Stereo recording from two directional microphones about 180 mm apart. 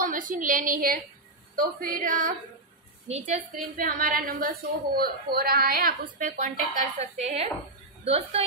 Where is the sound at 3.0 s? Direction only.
40° right (ahead or behind).